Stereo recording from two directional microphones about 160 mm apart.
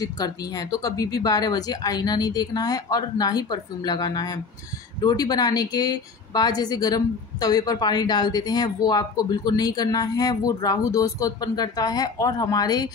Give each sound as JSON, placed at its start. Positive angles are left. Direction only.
{"t": 0.0, "sound": "a woman's voice", "side_deg": 25}